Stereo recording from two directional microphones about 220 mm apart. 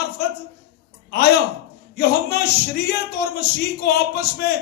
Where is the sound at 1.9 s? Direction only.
45° left (ahead or behind).